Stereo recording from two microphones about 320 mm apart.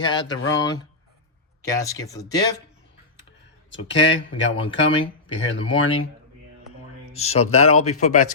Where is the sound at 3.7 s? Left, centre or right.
Left.